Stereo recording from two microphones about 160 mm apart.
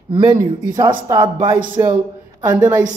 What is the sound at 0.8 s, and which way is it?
A woman's voice, 25° right (ahead or behind).